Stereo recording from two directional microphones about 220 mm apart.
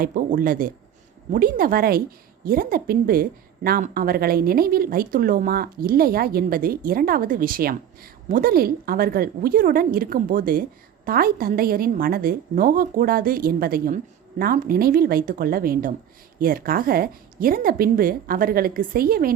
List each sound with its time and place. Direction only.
0.0 s a woman's voice: 40° right (ahead or behind)